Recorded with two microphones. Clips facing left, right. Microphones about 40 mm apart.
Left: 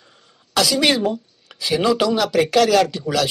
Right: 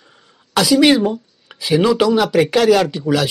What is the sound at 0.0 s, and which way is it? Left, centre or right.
Speech, centre.